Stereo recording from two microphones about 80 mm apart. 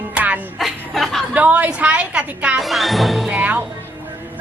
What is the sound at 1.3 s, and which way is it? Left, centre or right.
A woman's voice, centre.